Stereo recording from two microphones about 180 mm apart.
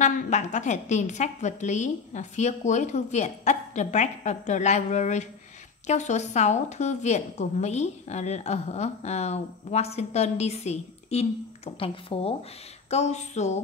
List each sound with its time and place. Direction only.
0.0 s a woman's voice: 45° left (ahead or behind)